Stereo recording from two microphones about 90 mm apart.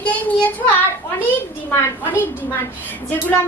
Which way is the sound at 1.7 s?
25° left (ahead or behind).